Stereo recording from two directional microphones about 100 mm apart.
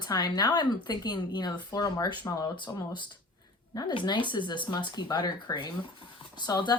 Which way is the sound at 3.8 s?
45° left (ahead or behind).